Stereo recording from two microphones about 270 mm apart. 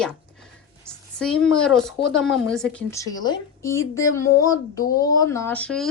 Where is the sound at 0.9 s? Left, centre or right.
Centre.